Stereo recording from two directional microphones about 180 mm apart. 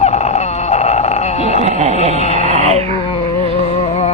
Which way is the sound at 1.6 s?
40° right (ahead or behind).